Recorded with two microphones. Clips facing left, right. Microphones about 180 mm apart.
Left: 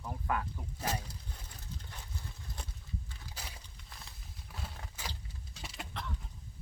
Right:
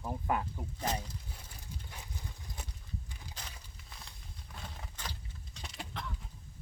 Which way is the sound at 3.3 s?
10° left (ahead or behind).